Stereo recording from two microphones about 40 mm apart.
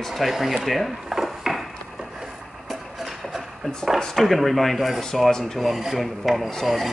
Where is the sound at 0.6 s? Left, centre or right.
Centre.